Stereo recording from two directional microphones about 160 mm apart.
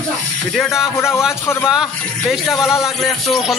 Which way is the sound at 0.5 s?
Centre (ahead or behind).